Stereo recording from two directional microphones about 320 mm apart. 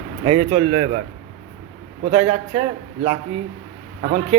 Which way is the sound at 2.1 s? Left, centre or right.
Centre.